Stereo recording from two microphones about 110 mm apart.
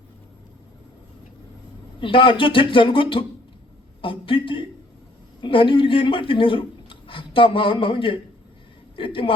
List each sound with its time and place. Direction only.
2.0 s speech: 50° left (ahead or behind)